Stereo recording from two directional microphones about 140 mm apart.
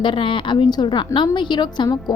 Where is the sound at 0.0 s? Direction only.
35° left (ahead or behind).